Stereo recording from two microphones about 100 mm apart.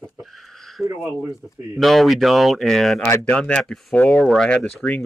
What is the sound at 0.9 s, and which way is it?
Speech, 15° right (ahead or behind).